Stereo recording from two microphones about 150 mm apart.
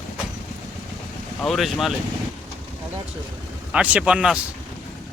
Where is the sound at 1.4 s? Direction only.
Centre (ahead or behind).